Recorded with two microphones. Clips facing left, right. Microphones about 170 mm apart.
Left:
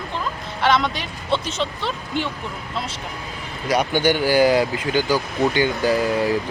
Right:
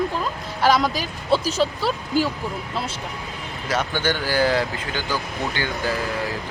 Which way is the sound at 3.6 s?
15° left (ahead or behind).